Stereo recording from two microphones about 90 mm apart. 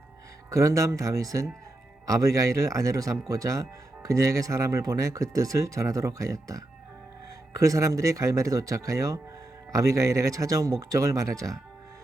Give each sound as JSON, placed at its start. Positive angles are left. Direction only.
{"t": 0.5, "sound": "a man's voice", "side_deg": -35}